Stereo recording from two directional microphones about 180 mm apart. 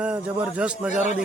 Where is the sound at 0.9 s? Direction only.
40° left (ahead or behind).